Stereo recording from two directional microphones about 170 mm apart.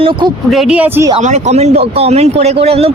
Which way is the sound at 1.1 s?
40° right (ahead or behind).